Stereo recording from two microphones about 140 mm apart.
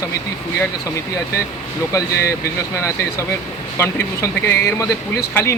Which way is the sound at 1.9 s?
20° left (ahead or behind).